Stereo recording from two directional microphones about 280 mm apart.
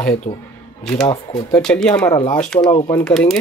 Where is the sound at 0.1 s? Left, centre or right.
Centre.